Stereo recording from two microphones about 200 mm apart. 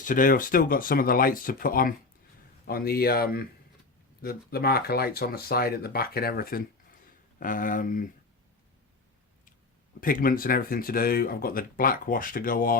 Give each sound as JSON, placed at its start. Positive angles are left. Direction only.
{"t": 0.0, "sound": "speech", "side_deg": 40}
{"t": 10.0, "sound": "speech", "side_deg": 45}